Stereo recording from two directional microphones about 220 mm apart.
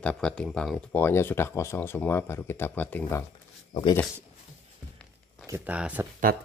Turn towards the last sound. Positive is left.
turn(degrees=-5)  # may be behind; listen again after turning